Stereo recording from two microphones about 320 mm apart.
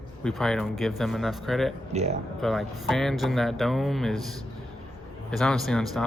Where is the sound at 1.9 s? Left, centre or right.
Centre.